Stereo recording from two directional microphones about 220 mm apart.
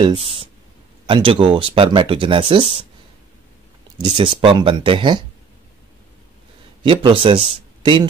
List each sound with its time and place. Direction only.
0.0 s speech: 25° right (ahead or behind)
4.0 s speech: 25° right (ahead or behind)
6.8 s a man's voice: 20° right (ahead or behind)